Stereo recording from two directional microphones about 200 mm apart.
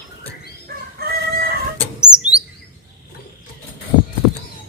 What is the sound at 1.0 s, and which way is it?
Chicken, 50° right (ahead or behind).